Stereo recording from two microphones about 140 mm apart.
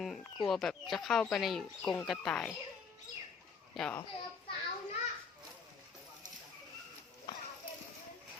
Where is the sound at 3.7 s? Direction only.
5° left (ahead or behind).